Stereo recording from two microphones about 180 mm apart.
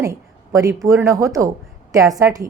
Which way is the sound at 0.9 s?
15° right (ahead or behind).